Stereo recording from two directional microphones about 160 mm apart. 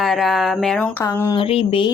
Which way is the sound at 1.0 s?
20° left (ahead or behind).